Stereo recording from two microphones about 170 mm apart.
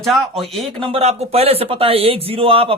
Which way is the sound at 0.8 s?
35° right (ahead or behind).